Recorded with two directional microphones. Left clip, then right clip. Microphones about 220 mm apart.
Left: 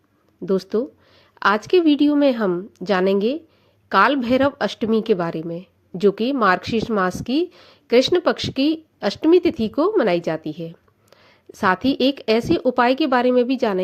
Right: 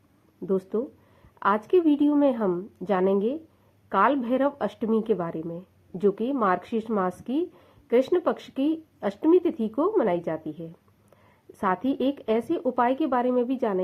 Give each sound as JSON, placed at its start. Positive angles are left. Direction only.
{"t": 1.4, "sound": "a woman's voice", "side_deg": 35}